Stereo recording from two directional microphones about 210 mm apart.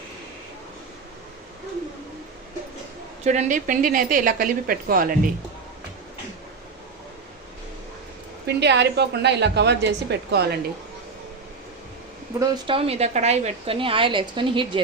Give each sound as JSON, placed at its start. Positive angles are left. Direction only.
{"t": 3.2, "sound": "a woman's voice", "side_deg": -35}
{"t": 8.4, "sound": "a woman's voice", "side_deg": -55}
{"t": 12.4, "sound": "a woman's voice", "side_deg": -25}